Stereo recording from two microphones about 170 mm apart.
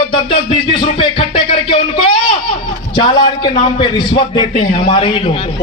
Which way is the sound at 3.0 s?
25° left (ahead or behind).